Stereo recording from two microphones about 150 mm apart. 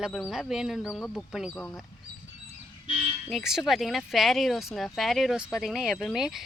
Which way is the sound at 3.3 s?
Centre (ahead or behind).